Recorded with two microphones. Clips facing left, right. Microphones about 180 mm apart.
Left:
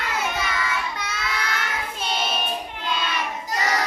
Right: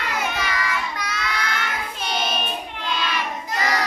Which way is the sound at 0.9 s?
25° left (ahead or behind).